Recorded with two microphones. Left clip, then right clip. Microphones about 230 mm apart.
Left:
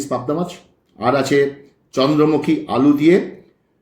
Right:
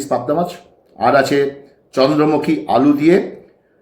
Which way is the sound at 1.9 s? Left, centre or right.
Centre.